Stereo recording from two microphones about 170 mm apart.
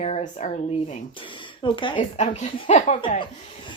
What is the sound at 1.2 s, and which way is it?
Speech, 30° left (ahead or behind).